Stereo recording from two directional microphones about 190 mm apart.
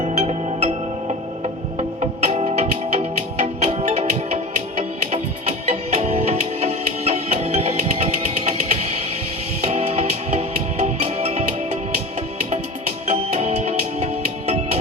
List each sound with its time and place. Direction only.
0.2 s music: 30° right (ahead or behind)
13.1 s music: 35° right (ahead or behind)